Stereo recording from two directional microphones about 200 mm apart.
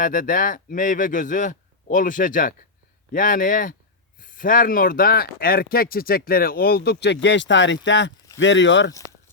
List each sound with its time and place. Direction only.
0.0 s speech: 40° left (ahead or behind); by 8.9 s 65° left (ahead or behind)